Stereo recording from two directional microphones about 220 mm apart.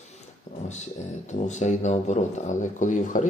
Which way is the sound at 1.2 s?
30° left (ahead or behind).